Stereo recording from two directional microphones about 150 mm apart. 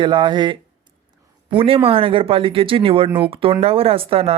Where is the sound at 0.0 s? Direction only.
30° right (ahead or behind).